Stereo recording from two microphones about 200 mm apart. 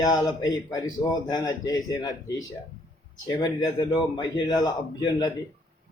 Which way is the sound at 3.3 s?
20° left (ahead or behind).